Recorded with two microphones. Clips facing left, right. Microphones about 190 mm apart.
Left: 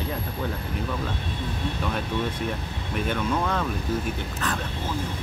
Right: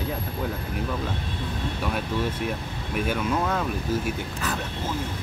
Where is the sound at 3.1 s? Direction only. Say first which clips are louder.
Even; 5° right (ahead or behind).